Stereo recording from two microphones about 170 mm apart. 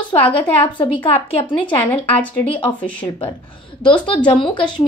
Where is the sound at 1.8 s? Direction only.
10° left (ahead or behind).